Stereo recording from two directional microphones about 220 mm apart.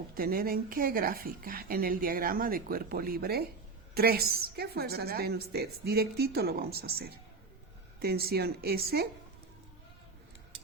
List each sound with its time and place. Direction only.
0.1 s a woman's voice: 40° right (ahead or behind)